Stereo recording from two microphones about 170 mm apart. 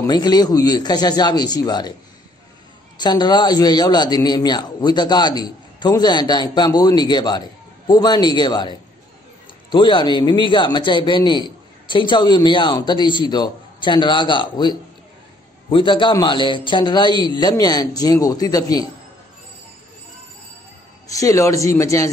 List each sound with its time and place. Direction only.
0.0 s a man's voice: 25° left (ahead or behind)
3.0 s a man's voice: 25° left (ahead or behind)
21.1 s a man's voice: 20° left (ahead or behind)